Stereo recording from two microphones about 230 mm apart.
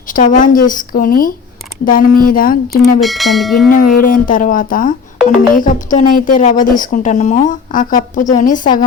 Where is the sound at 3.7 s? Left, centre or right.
Left.